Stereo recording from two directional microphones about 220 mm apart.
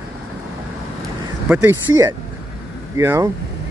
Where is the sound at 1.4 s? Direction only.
10° right (ahead or behind).